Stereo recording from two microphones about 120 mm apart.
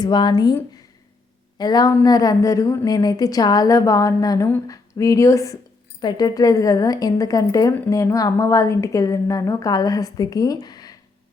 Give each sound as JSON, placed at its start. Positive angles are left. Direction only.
{"t": 0.0, "sound": "a woman's voice", "side_deg": 40}
{"t": 1.5, "sound": "a woman's voice", "side_deg": 35}